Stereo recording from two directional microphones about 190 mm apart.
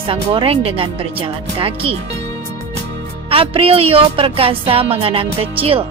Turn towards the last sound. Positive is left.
turn(degrees=-30)  # may be behind; listen again after turning